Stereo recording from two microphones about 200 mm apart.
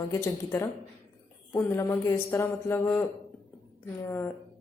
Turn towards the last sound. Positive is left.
turn(degrees=10)  # may be behind; listen again after turning